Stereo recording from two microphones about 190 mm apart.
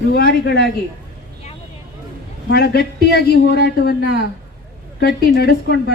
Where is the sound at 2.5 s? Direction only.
55° left (ahead or behind).